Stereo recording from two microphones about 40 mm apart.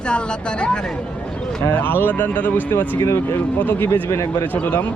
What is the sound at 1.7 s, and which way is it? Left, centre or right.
Speech, left.